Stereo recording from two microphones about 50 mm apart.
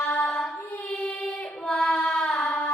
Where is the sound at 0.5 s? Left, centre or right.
Left.